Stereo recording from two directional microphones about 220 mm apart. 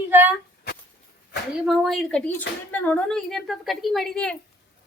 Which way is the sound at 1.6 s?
Centre (ahead or behind).